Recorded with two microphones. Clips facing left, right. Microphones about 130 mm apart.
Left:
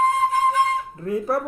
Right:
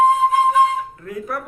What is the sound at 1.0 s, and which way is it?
Dishes, 30° left (ahead or behind).